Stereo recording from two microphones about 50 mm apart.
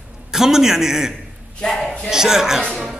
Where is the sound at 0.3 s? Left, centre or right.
Centre.